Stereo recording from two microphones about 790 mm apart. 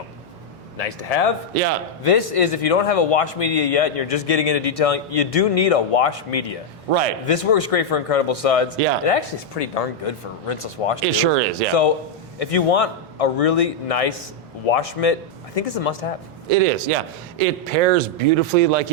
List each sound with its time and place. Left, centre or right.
0.8 s a man's voice: left
6.9 s a man's voice: right
7.3 s a man's voice: left
11.0 s a man's voice: right
12.4 s a man's voice: left
16.5 s a man's voice: right